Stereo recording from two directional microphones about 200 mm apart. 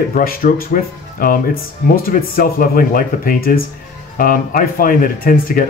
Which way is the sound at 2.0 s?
45° left (ahead or behind).